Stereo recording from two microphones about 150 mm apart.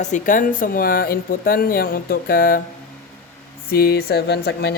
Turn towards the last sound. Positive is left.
turn(degrees=90)